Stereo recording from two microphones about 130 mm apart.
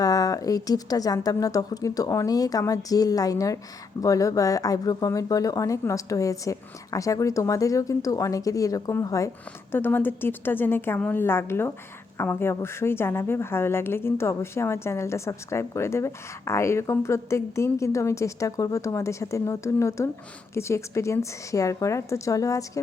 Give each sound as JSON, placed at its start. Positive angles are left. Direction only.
{"t": 0.0, "sound": "a woman's voice", "side_deg": 30}